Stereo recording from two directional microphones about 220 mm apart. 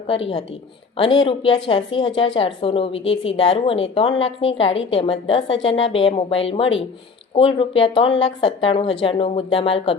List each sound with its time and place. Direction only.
0.1 s a woman's voice: 25° left (ahead or behind)